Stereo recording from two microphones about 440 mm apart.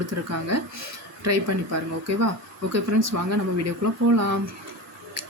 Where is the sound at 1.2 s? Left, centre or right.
Right.